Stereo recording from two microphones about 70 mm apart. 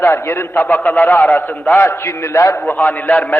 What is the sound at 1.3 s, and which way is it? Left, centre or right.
Speech, left.